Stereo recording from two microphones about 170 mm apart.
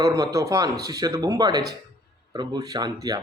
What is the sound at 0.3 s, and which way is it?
Speech, 20° right (ahead or behind).